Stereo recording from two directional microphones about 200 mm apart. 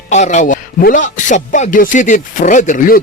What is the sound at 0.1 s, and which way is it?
A man's voice, 35° left (ahead or behind).